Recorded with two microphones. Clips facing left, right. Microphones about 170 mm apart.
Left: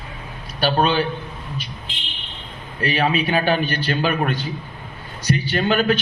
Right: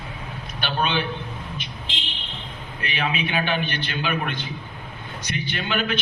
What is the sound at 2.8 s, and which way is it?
A man's voice, 40° left (ahead or behind).